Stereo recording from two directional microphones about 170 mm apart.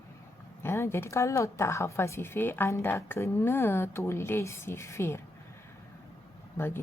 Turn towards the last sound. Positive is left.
turn(degrees=15)  # may be behind; listen again after turning